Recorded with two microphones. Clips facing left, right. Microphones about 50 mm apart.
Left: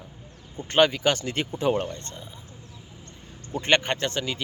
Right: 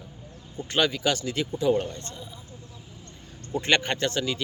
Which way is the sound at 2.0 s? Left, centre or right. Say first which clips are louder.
Right 1 dB; left.